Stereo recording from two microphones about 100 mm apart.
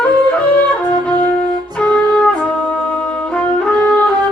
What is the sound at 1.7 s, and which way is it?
Music, 10° left (ahead or behind).